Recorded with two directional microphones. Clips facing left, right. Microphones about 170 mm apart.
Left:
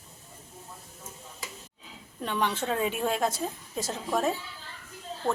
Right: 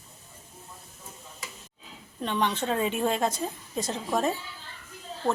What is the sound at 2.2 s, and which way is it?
A woman's voice, 10° left (ahead or behind).